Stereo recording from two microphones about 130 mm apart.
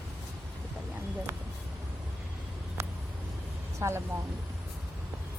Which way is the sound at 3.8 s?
20° right (ahead or behind).